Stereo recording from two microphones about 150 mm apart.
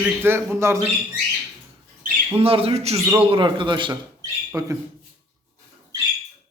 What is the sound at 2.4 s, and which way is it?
A man's voice, 40° right (ahead or behind).